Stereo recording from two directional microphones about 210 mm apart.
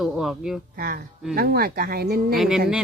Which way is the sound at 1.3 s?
45° right (ahead or behind).